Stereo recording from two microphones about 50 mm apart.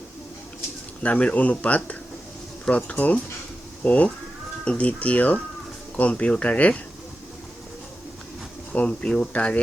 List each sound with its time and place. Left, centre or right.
1.0 s speech: left
8.7 s speech: left
9.0 s speech: centre